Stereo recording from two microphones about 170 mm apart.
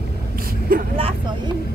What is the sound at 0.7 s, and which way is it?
Speech, 60° right (ahead or behind).